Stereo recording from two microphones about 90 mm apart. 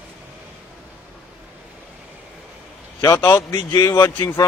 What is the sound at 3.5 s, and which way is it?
Mantra, 40° left (ahead or behind).